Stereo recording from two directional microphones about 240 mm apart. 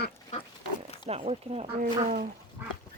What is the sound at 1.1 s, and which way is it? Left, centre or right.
Speech, right.